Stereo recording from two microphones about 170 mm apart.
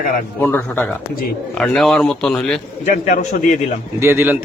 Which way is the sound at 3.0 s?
55° left (ahead or behind).